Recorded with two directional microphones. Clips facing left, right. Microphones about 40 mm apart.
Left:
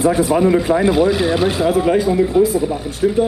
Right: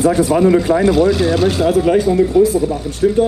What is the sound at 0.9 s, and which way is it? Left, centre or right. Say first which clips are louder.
Speech: right 2 dB; centre.